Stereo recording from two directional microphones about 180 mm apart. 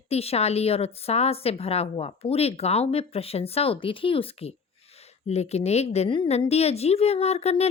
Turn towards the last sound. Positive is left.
turn(degrees=35)  # may be behind; listen again after turning